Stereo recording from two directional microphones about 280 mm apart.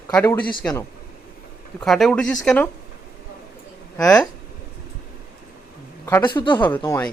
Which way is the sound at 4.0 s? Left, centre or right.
Centre.